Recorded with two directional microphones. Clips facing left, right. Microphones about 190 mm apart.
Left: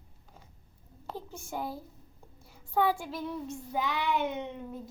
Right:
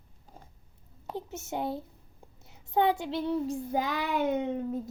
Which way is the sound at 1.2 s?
25° right (ahead or behind).